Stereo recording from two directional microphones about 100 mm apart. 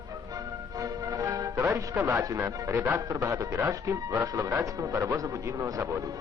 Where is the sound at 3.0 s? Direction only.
35° right (ahead or behind).